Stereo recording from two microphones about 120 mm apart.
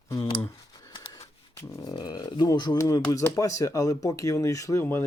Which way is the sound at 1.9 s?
35° left (ahead or behind).